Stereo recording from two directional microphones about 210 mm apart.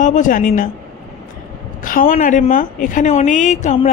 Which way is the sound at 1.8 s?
40° left (ahead or behind).